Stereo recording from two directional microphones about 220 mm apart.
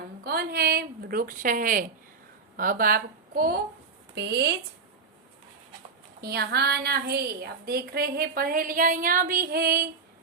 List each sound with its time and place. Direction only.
0.3 s a woman's voice: 45° right (ahead or behind)
6.2 s a woman's voice: 45° right (ahead or behind)